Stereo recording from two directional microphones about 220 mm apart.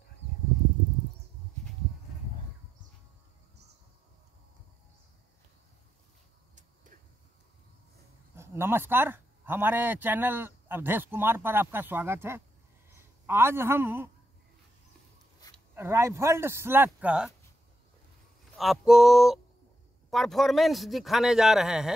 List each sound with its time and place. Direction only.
8.4 s speech: 10° right (ahead or behind)
15.7 s speech: 10° right (ahead or behind)
18.6 s a man's voice: centre (ahead or behind)